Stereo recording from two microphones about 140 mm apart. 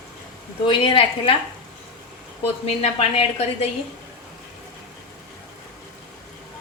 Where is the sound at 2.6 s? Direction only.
45° left (ahead or behind).